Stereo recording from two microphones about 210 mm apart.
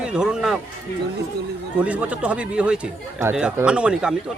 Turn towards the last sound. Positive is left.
turn(degrees=-5)  # may be behind; listen again after turning